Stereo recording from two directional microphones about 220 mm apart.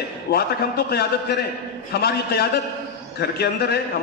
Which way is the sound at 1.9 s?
45° left (ahead or behind).